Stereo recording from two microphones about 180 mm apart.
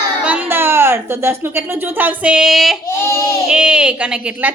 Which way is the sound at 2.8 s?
15° left (ahead or behind).